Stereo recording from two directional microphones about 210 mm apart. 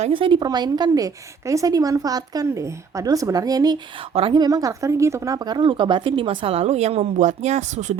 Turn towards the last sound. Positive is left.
turn(degrees=-35)  # may be behind; listen again after turning